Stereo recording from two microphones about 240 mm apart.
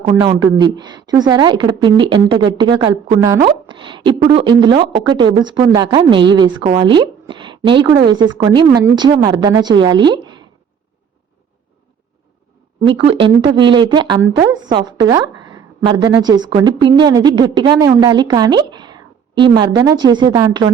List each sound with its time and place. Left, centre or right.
0.2 s speech: centre
12.8 s speech: right